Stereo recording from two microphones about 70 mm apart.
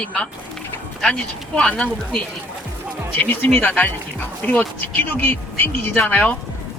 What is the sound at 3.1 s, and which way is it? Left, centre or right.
Speech, left.